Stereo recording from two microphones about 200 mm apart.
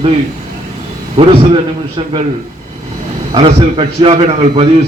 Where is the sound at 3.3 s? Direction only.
25° right (ahead or behind).